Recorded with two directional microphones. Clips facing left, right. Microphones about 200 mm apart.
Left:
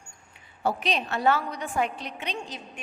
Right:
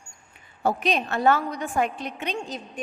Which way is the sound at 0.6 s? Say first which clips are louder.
Right 3 dB; 50° right (ahead or behind).